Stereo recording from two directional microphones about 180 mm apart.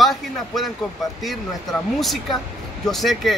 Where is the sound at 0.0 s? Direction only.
Centre (ahead or behind).